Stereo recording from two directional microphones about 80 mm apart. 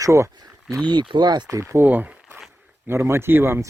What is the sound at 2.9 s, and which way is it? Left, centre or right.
Speech, right.